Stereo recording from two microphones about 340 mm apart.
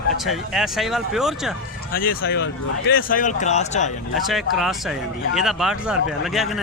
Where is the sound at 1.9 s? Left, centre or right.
Left.